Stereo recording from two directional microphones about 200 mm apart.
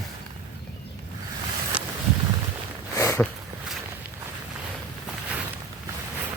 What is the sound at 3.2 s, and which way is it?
Speech, centre (ahead or behind).